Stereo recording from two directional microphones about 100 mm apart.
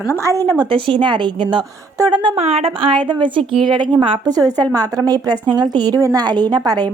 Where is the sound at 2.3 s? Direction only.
80° right.